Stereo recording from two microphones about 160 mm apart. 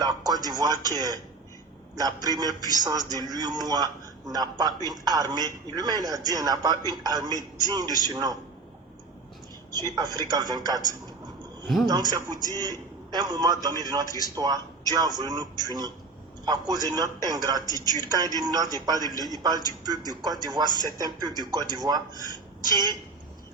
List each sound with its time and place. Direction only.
0.3 s a man's voice: 25° right (ahead or behind)
9.9 s a man's voice: 25° right (ahead or behind)
11.9 s a man's voice: 25° right (ahead or behind)